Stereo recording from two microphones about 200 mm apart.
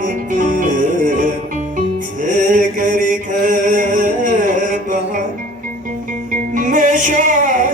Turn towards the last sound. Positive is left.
turn(degrees=-40)  # may be behind; listen again after turning